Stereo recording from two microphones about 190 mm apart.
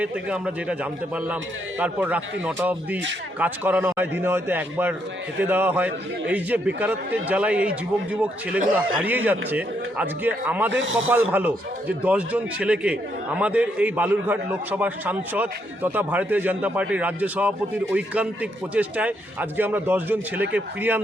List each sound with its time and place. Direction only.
0.0 s a man's voice: 5° right (ahead or behind)
10.8 s speech: 80° right
11.3 s a man's voice: 10° right (ahead or behind)